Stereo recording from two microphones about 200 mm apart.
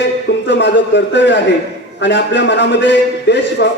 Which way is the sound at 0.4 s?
60° left (ahead or behind).